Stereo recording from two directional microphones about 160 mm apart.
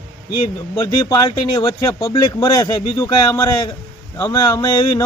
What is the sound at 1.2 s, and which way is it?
Speech, 30° left (ahead or behind).